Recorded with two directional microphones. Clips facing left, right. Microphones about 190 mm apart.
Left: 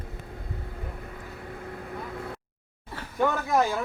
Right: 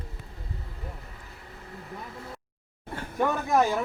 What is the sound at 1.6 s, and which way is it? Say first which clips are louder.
Vehicle: left 2 dB; 55° left (ahead or behind).